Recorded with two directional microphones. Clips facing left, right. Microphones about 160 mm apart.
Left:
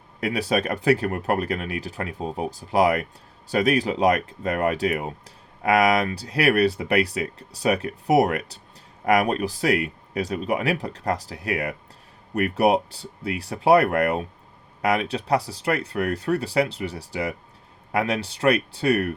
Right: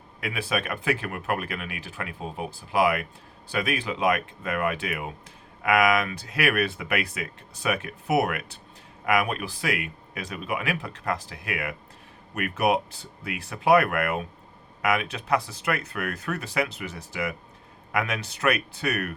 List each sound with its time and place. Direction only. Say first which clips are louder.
0.2 s speech: left 6 dB; 40° left (ahead or behind)